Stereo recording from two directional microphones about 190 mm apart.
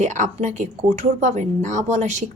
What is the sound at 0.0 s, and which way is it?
A woman's voice, 40° right (ahead or behind).